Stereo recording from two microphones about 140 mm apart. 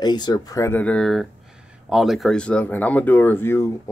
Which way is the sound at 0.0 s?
30° left (ahead or behind).